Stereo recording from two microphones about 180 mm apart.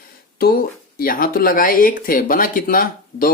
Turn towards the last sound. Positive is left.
turn(degrees=50)  # may be behind; listen again after turning